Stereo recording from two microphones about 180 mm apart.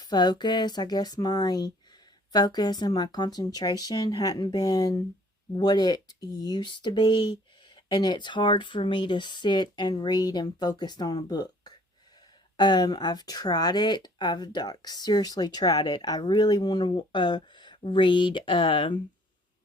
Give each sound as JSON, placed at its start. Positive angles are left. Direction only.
{"t": 0.0, "sound": "speech", "side_deg": 25}